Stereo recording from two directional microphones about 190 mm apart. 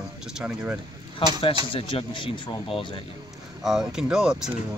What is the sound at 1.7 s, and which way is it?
Speech, 30° left (ahead or behind).